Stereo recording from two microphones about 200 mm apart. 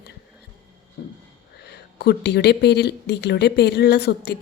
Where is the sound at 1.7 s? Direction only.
55° left (ahead or behind).